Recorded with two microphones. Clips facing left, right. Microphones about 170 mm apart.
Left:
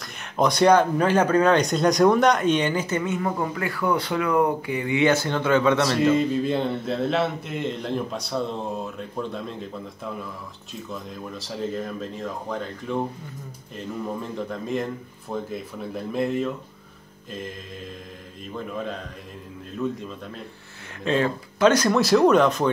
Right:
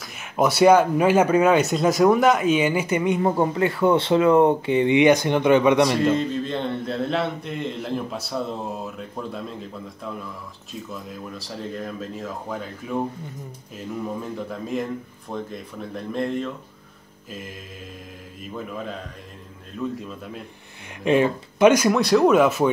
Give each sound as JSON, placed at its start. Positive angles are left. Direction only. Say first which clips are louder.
{"t": 0.0, "sound": "speech", "louder": "right 1 dB", "side_deg": -5}
{"t": 3.2, "sound": "speech", "louder": "right 6 dB", "side_deg": -30}
{"t": 6.1, "sound": "a man's voice", "louder": "left 3 dB", "side_deg": 5}
{"t": 14.5, "sound": "a man's voice", "louder": "right 1 dB", "side_deg": 0}
{"t": 19.8, "sound": "a man's voice", "louder": "left 1 dB", "side_deg": 5}
{"t": 21.0, "sound": "speech", "louder": "right 4 dB", "side_deg": -15}
{"t": 21.9, "sound": "a man's voice", "louder": "even", "side_deg": 0}